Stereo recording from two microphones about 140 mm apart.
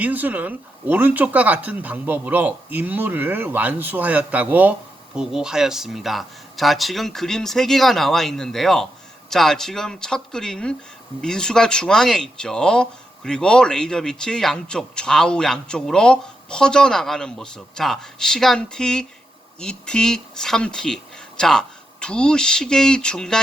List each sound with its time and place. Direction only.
0.0 s speech: 10° right (ahead or behind); by 23.4 s 5° left (ahead or behind)